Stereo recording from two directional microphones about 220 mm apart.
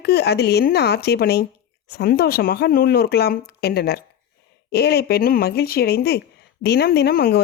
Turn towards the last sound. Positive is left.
turn(degrees=45)  # may be behind; listen again after turning